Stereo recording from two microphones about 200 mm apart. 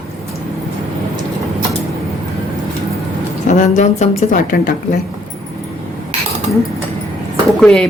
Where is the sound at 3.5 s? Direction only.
35° left (ahead or behind).